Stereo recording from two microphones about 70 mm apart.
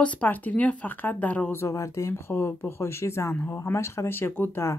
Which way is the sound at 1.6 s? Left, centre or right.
Left.